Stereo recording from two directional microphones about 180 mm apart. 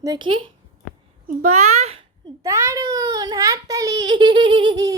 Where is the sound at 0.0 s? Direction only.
25° right (ahead or behind).